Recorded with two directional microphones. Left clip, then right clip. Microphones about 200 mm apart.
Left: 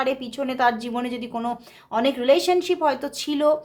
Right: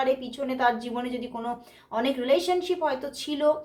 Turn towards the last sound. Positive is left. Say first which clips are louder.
# left 3 dB
turn(degrees=35)  # may be behind; listen again after turning